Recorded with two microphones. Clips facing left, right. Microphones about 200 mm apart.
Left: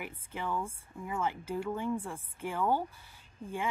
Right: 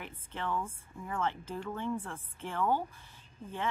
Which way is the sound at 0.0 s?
10° left (ahead or behind).